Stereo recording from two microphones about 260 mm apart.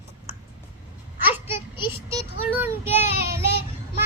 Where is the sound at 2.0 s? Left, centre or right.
Centre.